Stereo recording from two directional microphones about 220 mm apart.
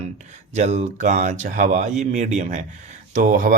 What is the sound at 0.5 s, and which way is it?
Speech, 30° right (ahead or behind).